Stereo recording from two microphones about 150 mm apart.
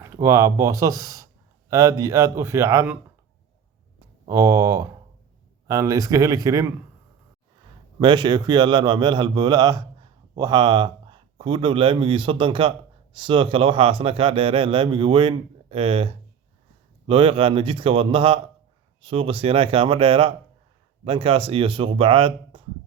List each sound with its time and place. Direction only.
0.0 s speech: 20° right (ahead or behind)
4.3 s speech: 20° right (ahead or behind)
7.9 s a man's voice: 30° right (ahead or behind)